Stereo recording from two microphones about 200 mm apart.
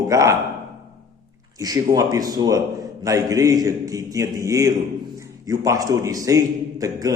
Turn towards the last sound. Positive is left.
turn(degrees=-15)  # may be behind; listen again after turning